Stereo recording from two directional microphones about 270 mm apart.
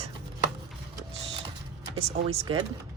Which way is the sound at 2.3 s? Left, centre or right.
Centre.